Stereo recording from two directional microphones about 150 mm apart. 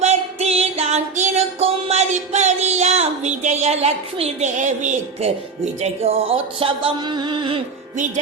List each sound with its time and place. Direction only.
0.0 s music: 45° right (ahead or behind)